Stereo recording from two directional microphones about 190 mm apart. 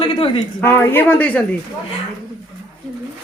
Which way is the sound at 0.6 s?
10° left (ahead or behind).